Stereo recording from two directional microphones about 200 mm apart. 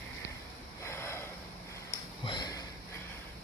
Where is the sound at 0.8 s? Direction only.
15° left (ahead or behind).